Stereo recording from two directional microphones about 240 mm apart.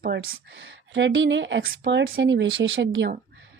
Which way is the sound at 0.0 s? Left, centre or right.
Right.